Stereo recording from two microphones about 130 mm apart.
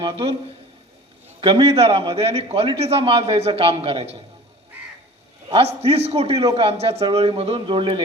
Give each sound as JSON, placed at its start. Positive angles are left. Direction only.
{"t": 0.0, "sound": "a man's voice", "side_deg": -45}
{"t": 1.4, "sound": "a man's voice", "side_deg": -45}
{"t": 5.5, "sound": "a man's voice", "side_deg": -50}